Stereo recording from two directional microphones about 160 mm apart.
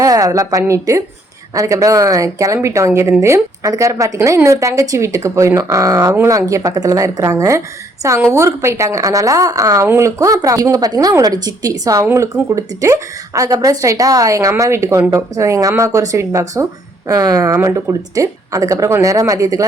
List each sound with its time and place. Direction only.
0.0 s a woman's voice: 20° right (ahead or behind)